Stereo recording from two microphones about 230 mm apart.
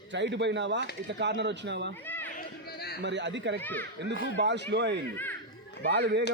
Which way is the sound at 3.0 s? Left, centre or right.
Right.